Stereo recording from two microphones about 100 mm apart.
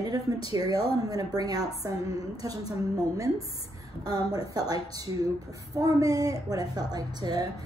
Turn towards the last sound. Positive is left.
turn(degrees=-40)  # may be behind; listen again after turning